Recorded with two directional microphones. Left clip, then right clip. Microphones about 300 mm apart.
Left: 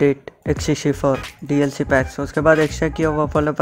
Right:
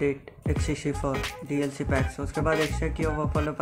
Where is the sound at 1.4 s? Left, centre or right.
Left.